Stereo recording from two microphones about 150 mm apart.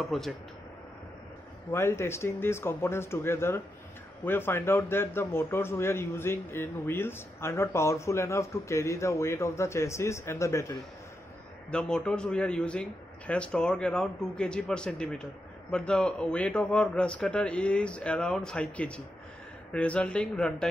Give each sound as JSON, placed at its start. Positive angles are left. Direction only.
{"t": 0.0, "sound": "speech", "side_deg": 0}
{"t": 1.7, "sound": "a man's voice", "side_deg": 15}
{"t": 11.7, "sound": "a man's voice", "side_deg": 5}